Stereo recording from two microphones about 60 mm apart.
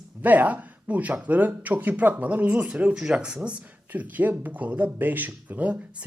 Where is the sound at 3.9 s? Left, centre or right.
Right.